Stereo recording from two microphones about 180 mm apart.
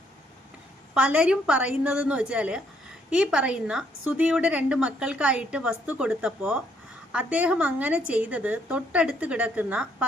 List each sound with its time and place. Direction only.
0.9 s a woman's voice: 5° right (ahead or behind)